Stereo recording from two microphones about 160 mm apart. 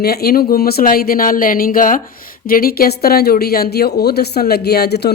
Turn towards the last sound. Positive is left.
turn(degrees=90)